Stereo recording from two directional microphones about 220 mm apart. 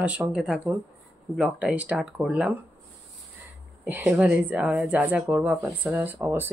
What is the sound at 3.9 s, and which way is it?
Speech, 10° right (ahead or behind).